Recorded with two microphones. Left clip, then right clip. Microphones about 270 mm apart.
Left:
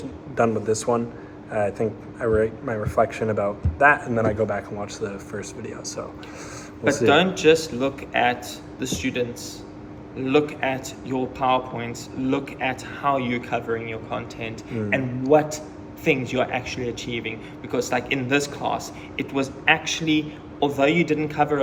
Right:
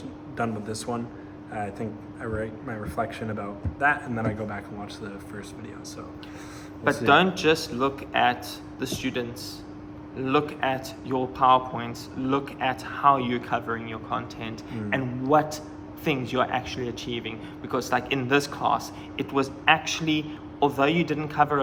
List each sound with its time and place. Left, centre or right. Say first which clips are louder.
0.3 s a man's voice: left 9 dB; centre
7.0 s a man's voice: left 2 dB; centre